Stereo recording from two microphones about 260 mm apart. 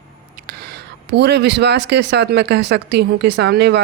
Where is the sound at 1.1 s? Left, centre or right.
Right.